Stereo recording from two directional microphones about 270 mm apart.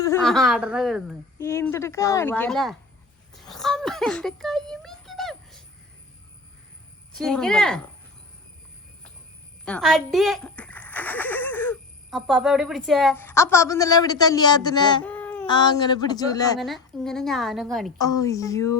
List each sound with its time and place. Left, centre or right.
0.0 s a woman's voice: centre
1.4 s a woman's voice: centre
7.1 s a woman's voice: centre
9.6 s speech: centre
15.0 s a sound: centre
15.4 s a woman's voice: centre
16.6 s a woman's voice: centre
18.0 s a woman's voice: centre